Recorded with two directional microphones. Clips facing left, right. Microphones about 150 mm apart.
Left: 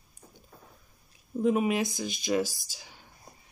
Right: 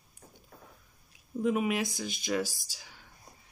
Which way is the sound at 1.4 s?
30° left (ahead or behind).